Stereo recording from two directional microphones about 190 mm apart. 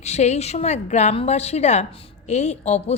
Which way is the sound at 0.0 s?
35° left (ahead or behind).